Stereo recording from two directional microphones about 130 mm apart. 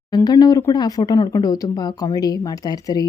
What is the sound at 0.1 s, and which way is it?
A woman's voice, 30° left (ahead or behind).